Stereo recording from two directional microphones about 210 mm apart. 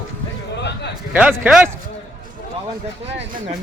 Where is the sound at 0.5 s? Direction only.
55° left (ahead or behind).